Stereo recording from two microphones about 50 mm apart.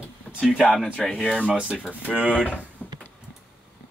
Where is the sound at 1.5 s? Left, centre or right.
Centre.